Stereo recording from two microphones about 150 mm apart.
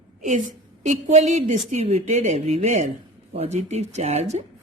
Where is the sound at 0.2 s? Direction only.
55° right (ahead or behind).